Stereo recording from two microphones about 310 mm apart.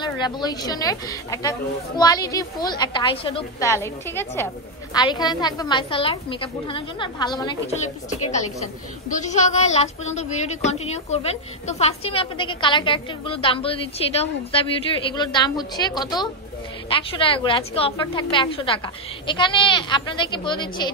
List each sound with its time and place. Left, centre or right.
0.0 s a woman's voice: centre
9.2 s a woman's voice: left